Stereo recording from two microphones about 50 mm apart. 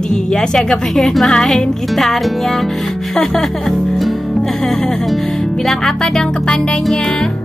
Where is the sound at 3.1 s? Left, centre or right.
Centre.